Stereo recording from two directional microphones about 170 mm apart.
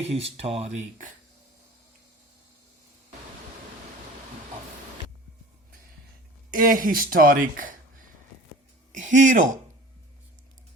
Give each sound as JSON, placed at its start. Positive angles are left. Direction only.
{"t": 0.0, "sound": "speech", "side_deg": -35}
{"t": 6.6, "sound": "speech", "side_deg": -55}